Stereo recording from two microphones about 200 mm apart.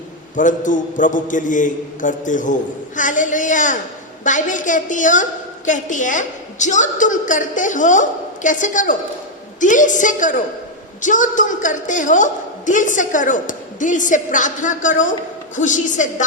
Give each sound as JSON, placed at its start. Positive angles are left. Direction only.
{"t": 0.3, "sound": "a woman's voice", "side_deg": 40}